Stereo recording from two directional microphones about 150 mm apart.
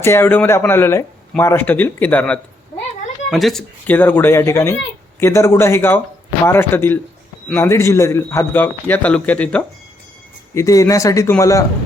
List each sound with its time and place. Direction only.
0.0 s a man's voice: 15° left (ahead or behind)
3.8 s a man's voice: 15° left (ahead or behind)